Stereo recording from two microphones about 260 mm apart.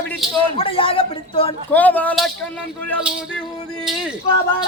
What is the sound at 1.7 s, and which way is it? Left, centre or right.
Speech, centre.